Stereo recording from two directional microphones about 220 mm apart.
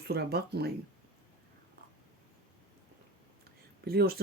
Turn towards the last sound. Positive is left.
turn(degrees=-45)  # may be behind; listen again after turning